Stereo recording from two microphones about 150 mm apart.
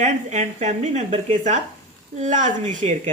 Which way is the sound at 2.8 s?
45° right (ahead or behind).